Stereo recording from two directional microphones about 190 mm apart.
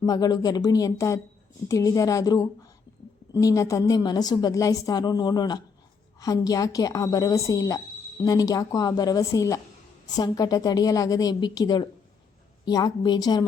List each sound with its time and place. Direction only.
0.0 s a woman's voice: 20° left (ahead or behind)